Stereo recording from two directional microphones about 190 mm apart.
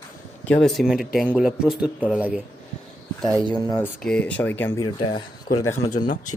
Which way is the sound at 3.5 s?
15° left (ahead or behind).